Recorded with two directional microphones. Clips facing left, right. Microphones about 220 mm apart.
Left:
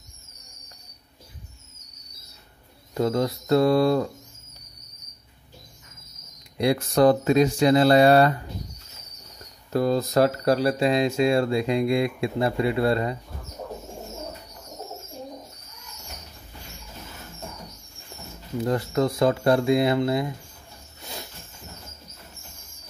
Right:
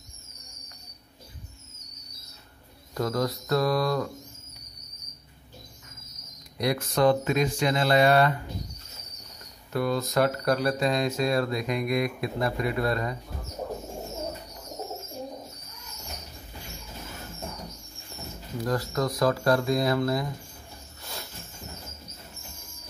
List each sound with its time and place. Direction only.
2.9 s speech: 25° left (ahead or behind)
6.6 s speech: 30° left (ahead or behind)
9.7 s speech: 35° left (ahead or behind)
18.6 s speech: 25° left (ahead or behind)
21.0 s a sound: 15° left (ahead or behind)